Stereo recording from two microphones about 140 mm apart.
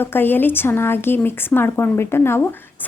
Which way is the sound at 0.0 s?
15° left (ahead or behind).